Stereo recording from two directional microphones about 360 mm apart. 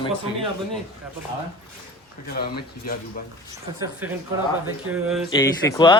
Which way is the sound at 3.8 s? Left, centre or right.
Centre.